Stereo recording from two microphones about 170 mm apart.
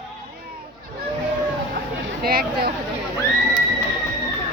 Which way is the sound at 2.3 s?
60° right (ahead or behind).